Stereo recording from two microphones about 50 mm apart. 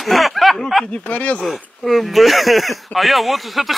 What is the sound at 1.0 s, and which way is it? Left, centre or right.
Speech, left.